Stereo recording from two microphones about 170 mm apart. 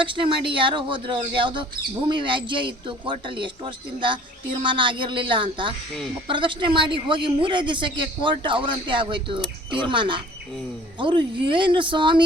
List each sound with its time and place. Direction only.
0.0 s speech: 30° right (ahead or behind)